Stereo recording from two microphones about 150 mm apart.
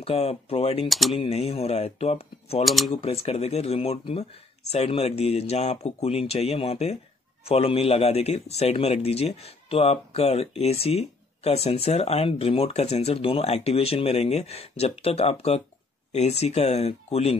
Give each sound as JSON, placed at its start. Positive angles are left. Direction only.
{"t": 0.0, "sound": "a man's voice", "side_deg": 40}
{"t": 0.8, "sound": "speech", "side_deg": 0}
{"t": 1.2, "sound": "a man's voice", "side_deg": 40}
{"t": 2.6, "sound": "speech", "side_deg": 0}
{"t": 2.9, "sound": "a man's voice", "side_deg": 40}